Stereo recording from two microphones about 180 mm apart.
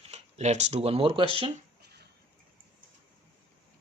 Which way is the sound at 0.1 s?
40° right (ahead or behind).